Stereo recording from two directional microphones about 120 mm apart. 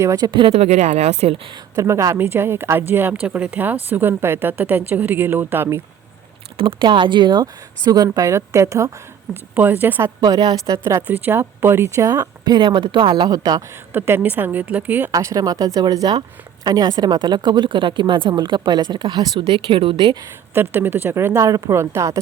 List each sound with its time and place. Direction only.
0.0 s speech: 25° right (ahead or behind)
0.3 s speech: 45° right (ahead or behind)
1.7 s a woman's voice: 25° right (ahead or behind)
6.6 s speech: 45° right (ahead or behind); by 8.9 s 25° right (ahead or behind)
9.3 s a woman's voice: 15° right (ahead or behind)
10.2 s speech: 30° right (ahead or behind)
11.0 s speech: 15° right (ahead or behind); by 13.7 s 35° right (ahead or behind)
13.9 s a woman's voice: 20° right (ahead or behind)
15.1 s speech: 30° right (ahead or behind); by 20.1 s 45° right (ahead or behind)
20.5 s speech: 15° right (ahead or behind)